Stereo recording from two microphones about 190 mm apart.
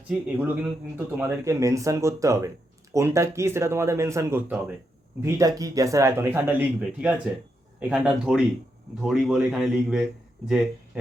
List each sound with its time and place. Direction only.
0.3 s a man's voice: 10° right (ahead or behind)